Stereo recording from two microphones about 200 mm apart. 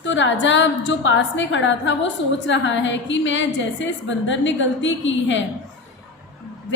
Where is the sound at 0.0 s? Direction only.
70° left (ahead or behind).